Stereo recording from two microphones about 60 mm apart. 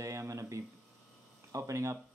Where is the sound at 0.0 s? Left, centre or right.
Right.